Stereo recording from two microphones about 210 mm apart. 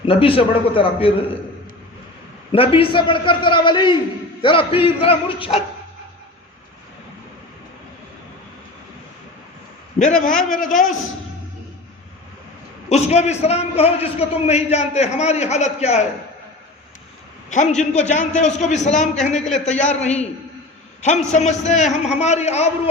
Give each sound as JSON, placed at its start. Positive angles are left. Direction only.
{"t": 0.0, "sound": "a man's voice", "side_deg": 25}
{"t": 2.5, "sound": "a man's voice", "side_deg": 25}
{"t": 10.0, "sound": "a man's voice", "side_deg": 35}
{"t": 10.7, "sound": "speech", "side_deg": 0}
{"t": 12.9, "sound": "a man's voice", "side_deg": 30}
{"t": 17.5, "sound": "a man's voice", "side_deg": 35}
{"t": 19.3, "sound": "speech", "side_deg": 5}
{"t": 19.9, "sound": "a man's voice", "side_deg": 30}